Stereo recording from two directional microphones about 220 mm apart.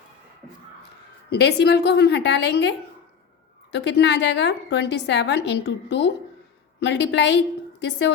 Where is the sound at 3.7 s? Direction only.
50° left (ahead or behind).